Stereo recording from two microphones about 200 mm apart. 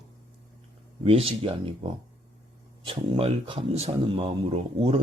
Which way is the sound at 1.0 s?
30° right (ahead or behind).